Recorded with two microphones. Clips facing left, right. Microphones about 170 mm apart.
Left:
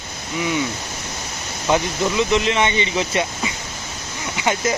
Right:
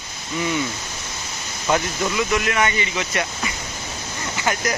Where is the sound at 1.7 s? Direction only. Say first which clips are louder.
Left 2 dB; 20° left (ahead or behind).